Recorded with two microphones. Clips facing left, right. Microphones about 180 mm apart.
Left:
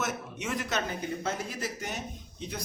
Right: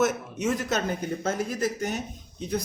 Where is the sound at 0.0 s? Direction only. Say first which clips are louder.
Right 9 dB; 40° right (ahead or behind).